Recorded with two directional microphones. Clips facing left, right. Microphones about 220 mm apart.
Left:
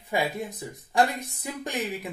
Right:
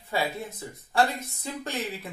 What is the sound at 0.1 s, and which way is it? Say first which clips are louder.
Speech: left 2 dB; 15° left (ahead or behind).